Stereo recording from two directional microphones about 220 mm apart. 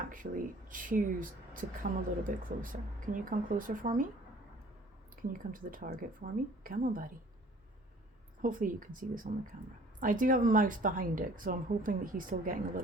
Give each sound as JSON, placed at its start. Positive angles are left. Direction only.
{"t": 0.1, "sound": "speech", "side_deg": -35}
{"t": 5.2, "sound": "speech", "side_deg": -40}
{"t": 8.4, "sound": "speech", "side_deg": -35}